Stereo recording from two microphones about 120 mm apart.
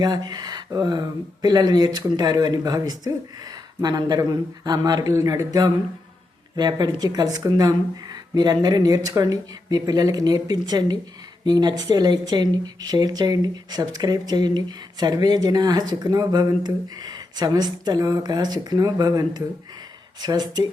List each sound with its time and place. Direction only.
0.0 s speech: 35° right (ahead or behind)